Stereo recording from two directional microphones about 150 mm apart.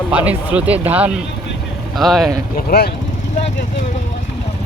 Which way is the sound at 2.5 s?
90° left.